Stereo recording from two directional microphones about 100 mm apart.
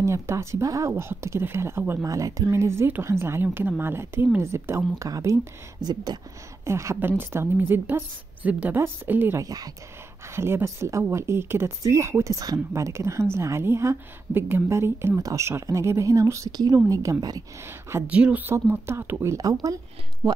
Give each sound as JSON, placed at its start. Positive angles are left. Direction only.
{"t": 0.0, "sound": "speech", "side_deg": -30}
{"t": 2.0, "sound": "speech", "side_deg": -35}
{"t": 6.6, "sound": "speech", "side_deg": -30}
{"t": 9.4, "sound": "a woman's voice", "side_deg": -40}
{"t": 10.3, "sound": "a woman's voice", "side_deg": -25}
{"t": 17.6, "sound": "speech", "side_deg": -25}
{"t": 18.0, "sound": "speech", "side_deg": -15}
{"t": 19.6, "sound": "a woman's voice", "side_deg": -35}
{"t": 20.2, "sound": "speech", "side_deg": -5}